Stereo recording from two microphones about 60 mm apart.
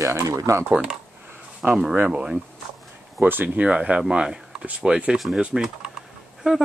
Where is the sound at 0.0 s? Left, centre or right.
Right.